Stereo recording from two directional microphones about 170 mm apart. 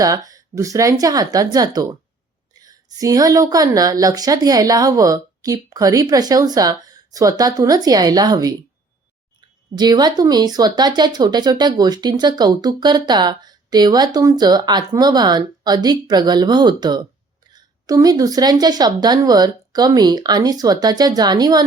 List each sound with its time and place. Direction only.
0.0 s speech: 20° right (ahead or behind)
9.7 s speech: 25° right (ahead or behind)